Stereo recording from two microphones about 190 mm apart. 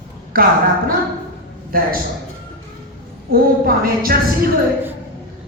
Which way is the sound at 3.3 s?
50° right (ahead or behind).